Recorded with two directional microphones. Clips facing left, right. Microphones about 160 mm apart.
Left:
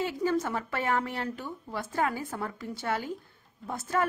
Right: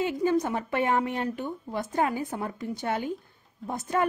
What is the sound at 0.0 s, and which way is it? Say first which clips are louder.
Speech: right 3 dB; 15° right (ahead or behind).